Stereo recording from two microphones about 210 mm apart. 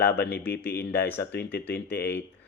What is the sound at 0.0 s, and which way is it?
Speech, 50° left (ahead or behind).